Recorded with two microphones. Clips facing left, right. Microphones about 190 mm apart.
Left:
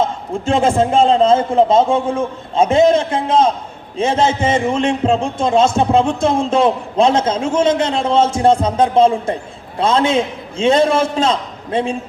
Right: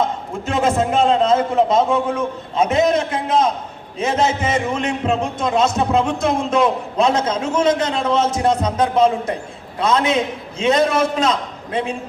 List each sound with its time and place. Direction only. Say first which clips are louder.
0.4 s a man's voice: left 4 dB; 30° left (ahead or behind)